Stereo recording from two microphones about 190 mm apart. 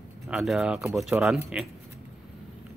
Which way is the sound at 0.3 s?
Centre (ahead or behind).